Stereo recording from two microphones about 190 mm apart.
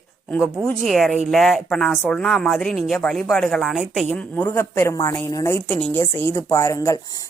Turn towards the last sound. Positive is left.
turn(degrees=15)  # may be behind; listen again after turning